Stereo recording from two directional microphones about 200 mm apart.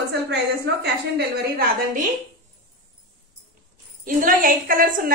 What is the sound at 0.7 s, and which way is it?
A woman's voice, 55° right (ahead or behind).